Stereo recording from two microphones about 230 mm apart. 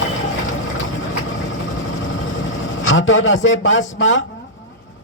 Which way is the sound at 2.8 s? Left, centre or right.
Left.